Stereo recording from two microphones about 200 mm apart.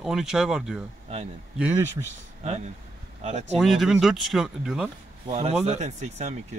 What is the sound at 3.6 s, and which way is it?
Speech, centre (ahead or behind).